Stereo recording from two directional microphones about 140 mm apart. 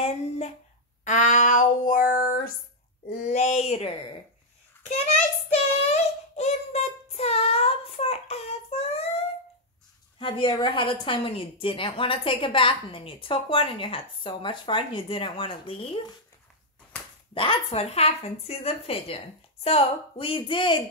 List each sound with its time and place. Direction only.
0.0 s a sound: 50° left (ahead or behind)
1.0 s female singing: 60° left (ahead or behind); by 2.5 s 90° left
3.1 s a sound: 65° left (ahead or behind); by 3.9 s 50° left (ahead or behind)
5.5 s child singing: 50° left (ahead or behind)
10.1 s a woman's voice: 35° left (ahead or behind)
17.3 s speech: 40° left (ahead or behind)